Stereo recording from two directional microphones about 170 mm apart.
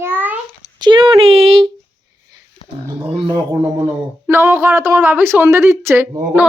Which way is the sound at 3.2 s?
20° right (ahead or behind).